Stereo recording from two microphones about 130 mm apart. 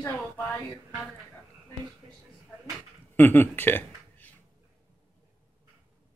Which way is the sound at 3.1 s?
15° left (ahead or behind).